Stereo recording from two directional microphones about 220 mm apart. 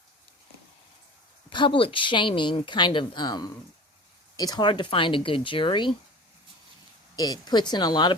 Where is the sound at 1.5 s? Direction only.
25° left (ahead or behind).